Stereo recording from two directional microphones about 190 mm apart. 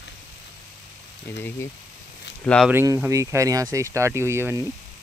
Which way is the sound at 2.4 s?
5° left (ahead or behind).